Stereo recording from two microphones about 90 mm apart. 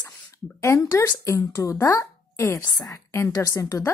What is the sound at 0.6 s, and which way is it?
A woman's voice, 35° left (ahead or behind).